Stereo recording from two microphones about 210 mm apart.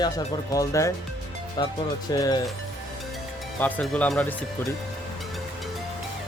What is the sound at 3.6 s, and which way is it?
Speech, 5° left (ahead or behind).